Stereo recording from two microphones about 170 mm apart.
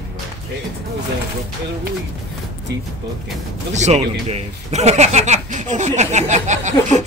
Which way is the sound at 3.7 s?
40° right (ahead or behind).